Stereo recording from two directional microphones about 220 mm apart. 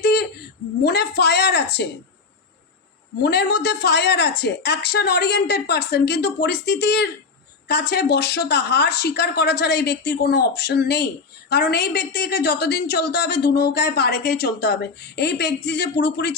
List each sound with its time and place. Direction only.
0.0 s a sound: 45° left (ahead or behind)
0.9 s a woman's voice: 45° left (ahead or behind)
3.2 s a woman's voice: 50° left (ahead or behind)